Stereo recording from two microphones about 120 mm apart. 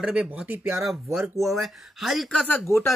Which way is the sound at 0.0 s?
10° right (ahead or behind).